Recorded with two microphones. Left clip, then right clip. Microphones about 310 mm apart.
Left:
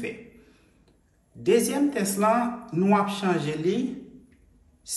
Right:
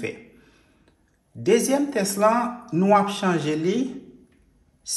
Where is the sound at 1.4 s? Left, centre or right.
Right.